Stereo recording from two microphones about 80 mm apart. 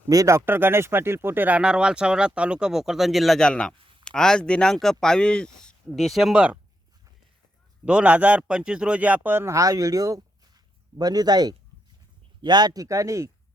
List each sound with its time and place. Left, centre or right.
0.1 s speech: right
0.4 s speech: right; by 3.8 s centre
3.8 s a sound: right
4.0 s speech: centre
7.9 s speech: centre
9.6 s speech: right